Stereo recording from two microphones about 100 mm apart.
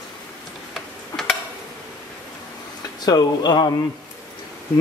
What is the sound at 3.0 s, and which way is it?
Speech, 45° left (ahead or behind).